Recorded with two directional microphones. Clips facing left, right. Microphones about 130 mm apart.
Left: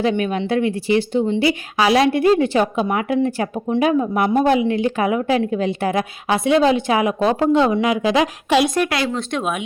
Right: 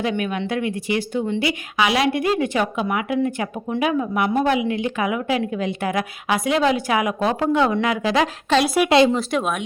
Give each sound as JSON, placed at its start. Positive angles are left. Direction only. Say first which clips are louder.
{"t": 0.0, "sound": "a woman's voice", "louder": "left 4 dB", "side_deg": 30}
{"t": 8.6, "sound": "a woman's voice", "louder": "right 4 dB", "side_deg": -10}